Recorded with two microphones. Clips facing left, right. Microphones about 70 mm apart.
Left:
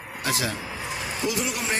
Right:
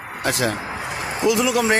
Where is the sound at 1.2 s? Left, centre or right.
Right.